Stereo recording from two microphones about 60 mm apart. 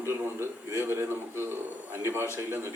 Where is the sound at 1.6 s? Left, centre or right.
Right.